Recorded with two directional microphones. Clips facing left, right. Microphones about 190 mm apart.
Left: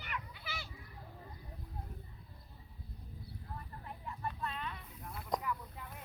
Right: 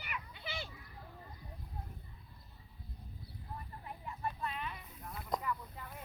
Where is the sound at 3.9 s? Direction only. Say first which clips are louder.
Right 1 dB; 10° right (ahead or behind).